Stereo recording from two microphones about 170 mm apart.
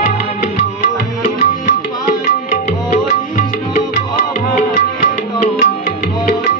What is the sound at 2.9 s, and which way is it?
Music, 55° left (ahead or behind).